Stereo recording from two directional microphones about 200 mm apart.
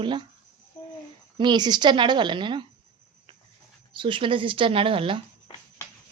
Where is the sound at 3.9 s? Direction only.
25° right (ahead or behind).